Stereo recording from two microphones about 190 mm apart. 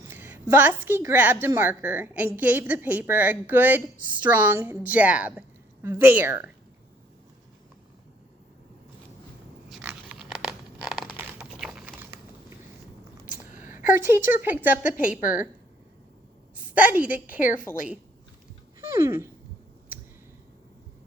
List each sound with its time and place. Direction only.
0.1 s a woman's voice: 10° right (ahead or behind)
9.6 s a sound: 5° right (ahead or behind)
13.2 s a sound: 45° left (ahead or behind)
13.9 s a woman's voice: 10° right (ahead or behind)
16.6 s a woman's voice: 10° right (ahead or behind)
17.4 s a woman's voice: 45° left (ahead or behind)
18.8 s dog: 15° right (ahead or behind)